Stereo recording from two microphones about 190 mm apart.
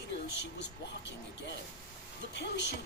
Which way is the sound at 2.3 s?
65° left (ahead or behind).